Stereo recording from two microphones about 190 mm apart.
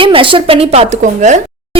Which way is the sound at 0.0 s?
25° right (ahead or behind).